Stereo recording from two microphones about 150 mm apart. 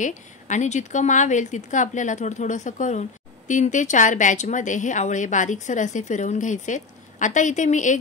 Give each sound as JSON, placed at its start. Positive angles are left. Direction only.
{"t": 0.0, "sound": "speech", "side_deg": 55}